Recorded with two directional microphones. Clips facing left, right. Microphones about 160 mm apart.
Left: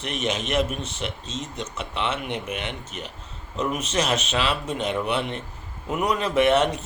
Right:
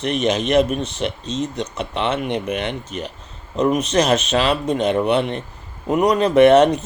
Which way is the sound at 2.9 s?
5° left (ahead or behind).